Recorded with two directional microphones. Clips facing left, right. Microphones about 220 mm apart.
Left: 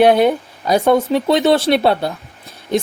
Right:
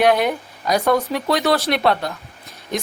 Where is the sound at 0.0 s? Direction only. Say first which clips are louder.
Left 5 dB; 30° left (ahead or behind).